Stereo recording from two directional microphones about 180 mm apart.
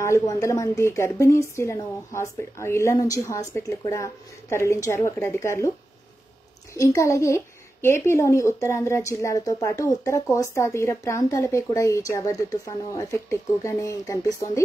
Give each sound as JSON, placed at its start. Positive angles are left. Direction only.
{"t": 0.0, "sound": "a woman's voice", "side_deg": 15}
{"t": 6.7, "sound": "a woman's voice", "side_deg": 15}